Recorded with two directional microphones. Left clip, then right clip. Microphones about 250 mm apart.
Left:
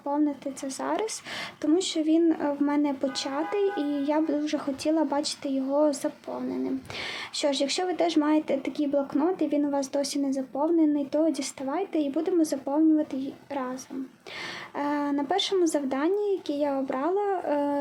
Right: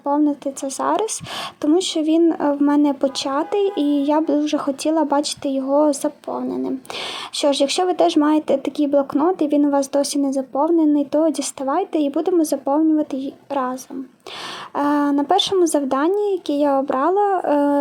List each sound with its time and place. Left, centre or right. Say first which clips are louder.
0.0 s speech: right 8 dB; right
14.8 s speech: right 10 dB; right